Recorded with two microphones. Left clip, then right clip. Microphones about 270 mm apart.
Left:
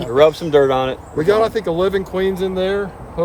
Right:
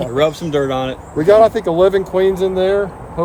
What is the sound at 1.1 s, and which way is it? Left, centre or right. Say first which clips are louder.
Speech: right 6 dB; centre.